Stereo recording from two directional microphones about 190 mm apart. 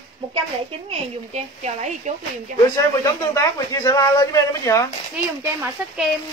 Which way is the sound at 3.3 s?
15° left (ahead or behind).